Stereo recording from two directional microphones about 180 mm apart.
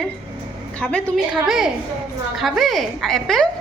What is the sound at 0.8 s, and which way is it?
A woman's voice, 5° left (ahead or behind).